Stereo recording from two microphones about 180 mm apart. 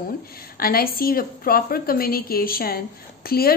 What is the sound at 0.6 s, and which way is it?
A woman's voice, 55° left (ahead or behind).